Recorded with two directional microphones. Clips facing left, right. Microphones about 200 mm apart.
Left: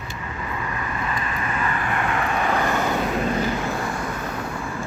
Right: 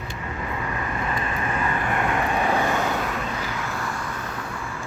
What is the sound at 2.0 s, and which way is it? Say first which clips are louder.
Vehicle: even; 20° right (ahead or behind).